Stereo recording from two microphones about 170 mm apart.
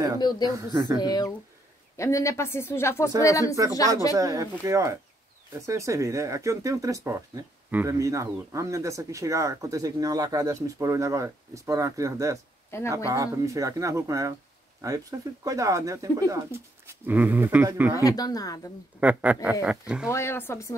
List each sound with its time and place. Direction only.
0.2 s speech: 25° left (ahead or behind)
0.5 s speech: 25° right (ahead or behind)
1.0 s speech: 20° left (ahead or behind)
4.2 s speech: 20° right (ahead or behind)
17.9 s speech: 20° left (ahead or behind)
18.9 s speech: 10° right (ahead or behind)
20.1 s speech: 15° left (ahead or behind)